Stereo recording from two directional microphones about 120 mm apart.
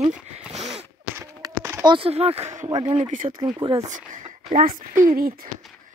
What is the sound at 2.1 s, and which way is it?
Speech, 60° right (ahead or behind).